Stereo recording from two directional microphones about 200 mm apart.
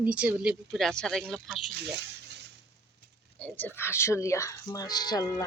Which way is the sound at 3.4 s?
10° left (ahead or behind).